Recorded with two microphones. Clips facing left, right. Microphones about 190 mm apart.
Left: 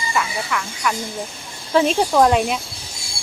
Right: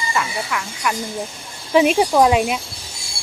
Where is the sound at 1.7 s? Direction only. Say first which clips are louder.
Right 2 dB; 10° right (ahead or behind).